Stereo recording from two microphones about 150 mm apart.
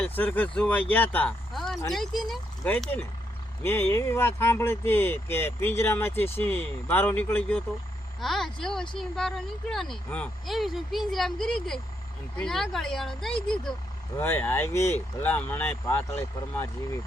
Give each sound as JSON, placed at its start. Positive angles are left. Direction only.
{"t": 0.0, "sound": "speech", "side_deg": 10}
{"t": 14.2, "sound": "speech", "side_deg": 15}